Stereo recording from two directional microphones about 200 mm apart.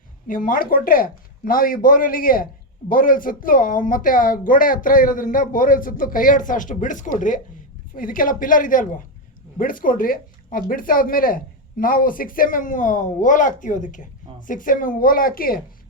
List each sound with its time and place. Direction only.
0.3 s speech: 45° left (ahead or behind)